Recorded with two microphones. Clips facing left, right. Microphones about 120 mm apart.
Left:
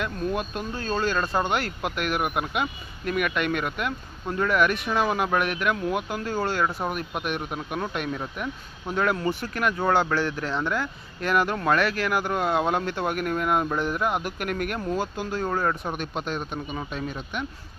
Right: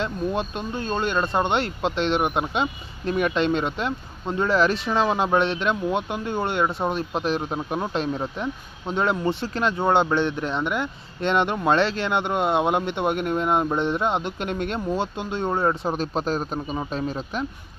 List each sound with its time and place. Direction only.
0.0 s a man's voice: 25° right (ahead or behind)